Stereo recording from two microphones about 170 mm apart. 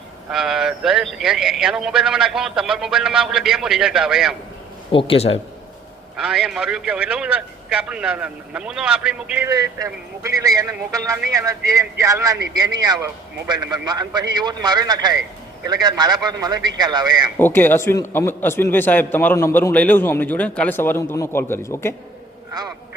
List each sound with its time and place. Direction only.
0.3 s speech: centre (ahead or behind)
4.9 s speech: 30° left (ahead or behind)
6.1 s speech: 5° right (ahead or behind)
9.5 s speech: 20° right (ahead or behind)
17.3 s a man's voice: 10° left (ahead or behind)